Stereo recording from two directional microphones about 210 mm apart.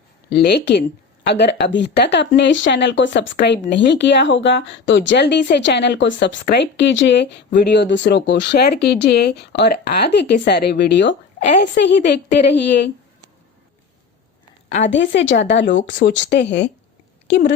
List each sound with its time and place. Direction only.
0.3 s a woman's voice: 50° left (ahead or behind)
11.3 s a woman's voice: 35° left (ahead or behind)
11.8 s a woman's voice: 55° left (ahead or behind)
14.8 s speech: 60° left (ahead or behind)